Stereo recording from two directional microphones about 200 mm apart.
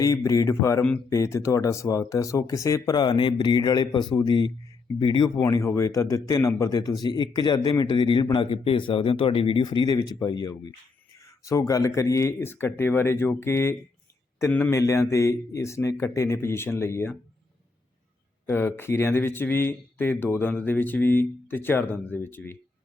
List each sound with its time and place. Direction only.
0.0 s a man's voice: 15° left (ahead or behind)
18.4 s speech: 10° left (ahead or behind)